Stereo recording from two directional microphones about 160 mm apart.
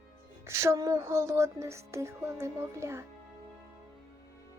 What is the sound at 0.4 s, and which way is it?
Speech, 15° right (ahead or behind).